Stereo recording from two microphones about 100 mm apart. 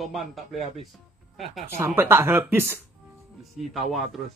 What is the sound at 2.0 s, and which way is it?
Speech, 20° right (ahead or behind).